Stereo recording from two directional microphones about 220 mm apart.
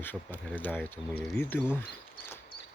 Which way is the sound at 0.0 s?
10° left (ahead or behind).